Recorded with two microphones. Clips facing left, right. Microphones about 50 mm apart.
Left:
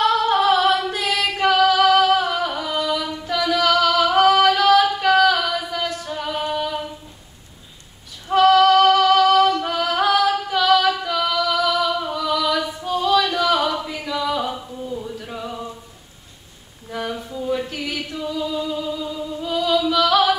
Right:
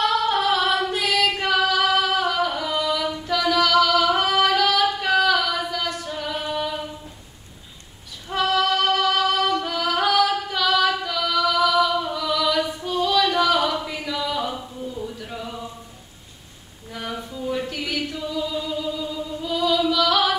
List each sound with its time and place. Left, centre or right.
0.0 s female singing: centre
0.8 s singing: centre
5.0 s singing: centre
8.3 s female singing: centre
8.7 s music: centre
9.2 s female singing: centre
11.3 s music: centre
12.8 s singing: centre
13.4 s a sound: centre
13.8 s music: centre
15.2 s singing: centre
17.5 s chant: centre
19.9 s music: centre